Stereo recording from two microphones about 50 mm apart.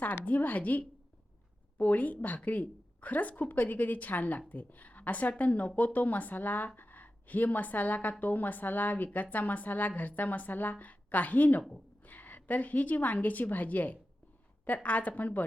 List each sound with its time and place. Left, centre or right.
0.3 s a woman's voice: left